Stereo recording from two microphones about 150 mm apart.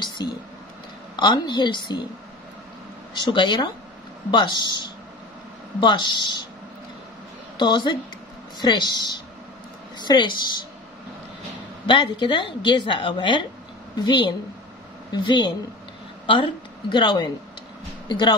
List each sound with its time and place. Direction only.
0.0 s a sound: 30° left (ahead or behind)
1.1 s a woman's voice: 30° left (ahead or behind)
3.2 s a woman's voice: 30° left (ahead or behind)
7.5 s a woman's voice: 30° left (ahead or behind)
11.8 s a woman's voice: 35° left (ahead or behind)